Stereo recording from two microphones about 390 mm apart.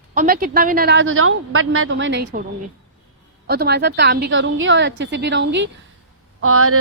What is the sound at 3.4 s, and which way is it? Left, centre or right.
A woman's voice, right.